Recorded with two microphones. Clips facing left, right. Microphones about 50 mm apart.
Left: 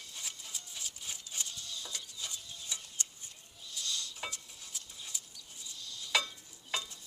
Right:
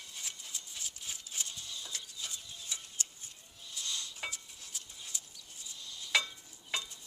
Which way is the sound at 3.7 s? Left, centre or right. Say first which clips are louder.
Left 1 dB; right.